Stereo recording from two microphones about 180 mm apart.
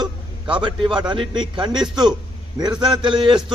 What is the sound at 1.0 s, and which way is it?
A man's voice, 25° right (ahead or behind).